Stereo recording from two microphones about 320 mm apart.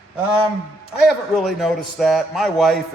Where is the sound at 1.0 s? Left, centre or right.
Centre.